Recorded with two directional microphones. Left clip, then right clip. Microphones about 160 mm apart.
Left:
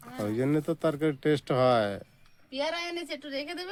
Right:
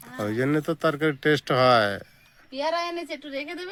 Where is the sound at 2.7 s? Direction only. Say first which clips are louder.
Right 6 dB; 40° left (ahead or behind).